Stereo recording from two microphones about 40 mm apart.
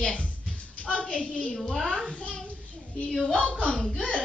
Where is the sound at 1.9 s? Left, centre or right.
Right.